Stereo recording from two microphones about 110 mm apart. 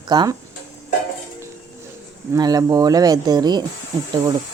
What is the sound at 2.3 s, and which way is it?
Speech, 35° right (ahead or behind).